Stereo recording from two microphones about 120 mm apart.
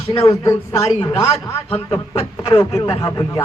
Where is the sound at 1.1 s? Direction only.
55° left (ahead or behind).